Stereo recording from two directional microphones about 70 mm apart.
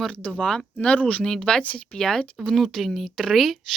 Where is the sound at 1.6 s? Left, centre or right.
Left.